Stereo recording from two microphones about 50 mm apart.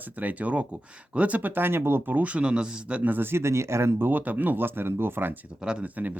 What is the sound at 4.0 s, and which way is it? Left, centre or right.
Speech, right.